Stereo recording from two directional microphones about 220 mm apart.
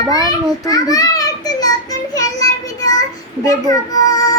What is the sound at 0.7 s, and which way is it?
Child singing, 15° left (ahead or behind).